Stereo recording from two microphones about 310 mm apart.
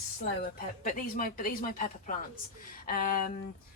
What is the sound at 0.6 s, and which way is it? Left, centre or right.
Speech, left.